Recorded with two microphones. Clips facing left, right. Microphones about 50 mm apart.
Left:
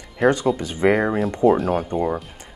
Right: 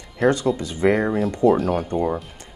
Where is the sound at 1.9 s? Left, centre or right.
Centre.